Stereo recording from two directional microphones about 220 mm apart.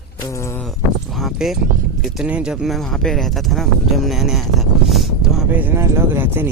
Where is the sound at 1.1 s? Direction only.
Centre (ahead or behind).